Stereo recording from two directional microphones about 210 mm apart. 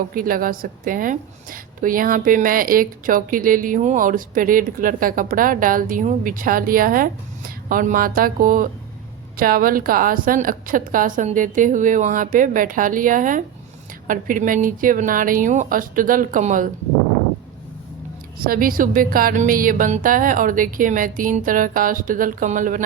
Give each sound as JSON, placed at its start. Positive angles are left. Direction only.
{"t": 0.1, "sound": "a woman's voice", "side_deg": -40}
{"t": 18.4, "sound": "a woman's voice", "side_deg": -45}